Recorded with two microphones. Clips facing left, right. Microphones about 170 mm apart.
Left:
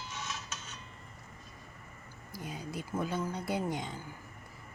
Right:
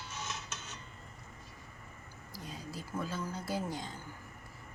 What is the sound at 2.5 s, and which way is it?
Speech, 20° left (ahead or behind).